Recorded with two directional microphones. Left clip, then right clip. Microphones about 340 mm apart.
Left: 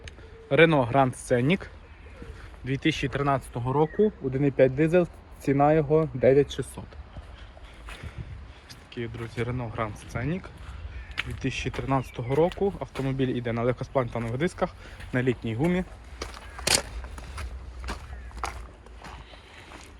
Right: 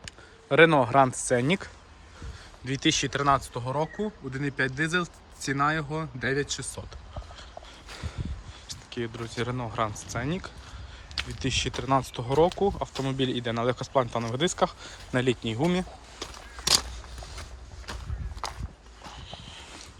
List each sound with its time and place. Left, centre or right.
0.0 s speech: centre
5.5 s speech: right
6.1 s speech: centre
8.9 s speech: centre